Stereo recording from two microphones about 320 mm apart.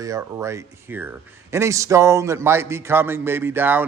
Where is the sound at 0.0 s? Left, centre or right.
Centre.